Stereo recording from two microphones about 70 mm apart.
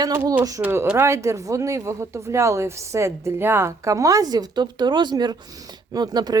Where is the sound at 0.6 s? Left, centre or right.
Right.